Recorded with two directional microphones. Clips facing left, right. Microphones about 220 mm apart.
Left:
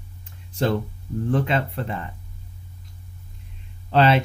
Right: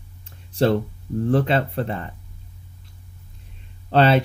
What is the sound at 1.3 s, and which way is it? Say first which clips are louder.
Speech: right 3 dB; 35° right (ahead or behind).